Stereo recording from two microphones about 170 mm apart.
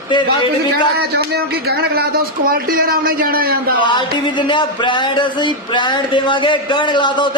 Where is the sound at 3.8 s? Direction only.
25° left (ahead or behind).